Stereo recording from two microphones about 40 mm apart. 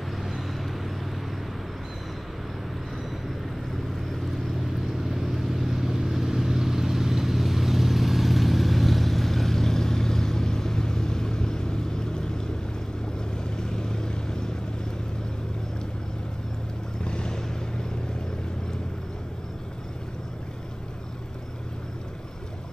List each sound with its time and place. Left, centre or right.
5.0 s vehicle: centre
17.0 s boat: left